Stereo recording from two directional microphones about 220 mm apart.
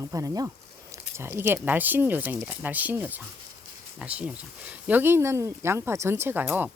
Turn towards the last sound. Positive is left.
turn(degrees=-10)  # may be behind; listen again after turning